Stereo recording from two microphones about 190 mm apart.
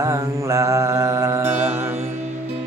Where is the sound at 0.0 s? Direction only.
15° right (ahead or behind).